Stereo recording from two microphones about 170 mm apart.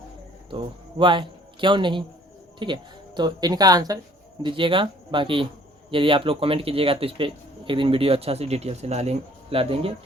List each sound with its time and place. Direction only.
0.5 s a man's voice: 30° right (ahead or behind)